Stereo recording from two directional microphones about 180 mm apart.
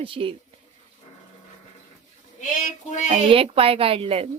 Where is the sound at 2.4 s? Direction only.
45° left (ahead or behind).